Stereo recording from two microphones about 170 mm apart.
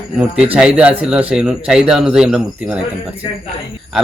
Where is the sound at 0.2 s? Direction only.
10° right (ahead or behind).